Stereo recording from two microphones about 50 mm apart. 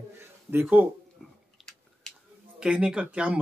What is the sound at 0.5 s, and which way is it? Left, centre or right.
Speech, right.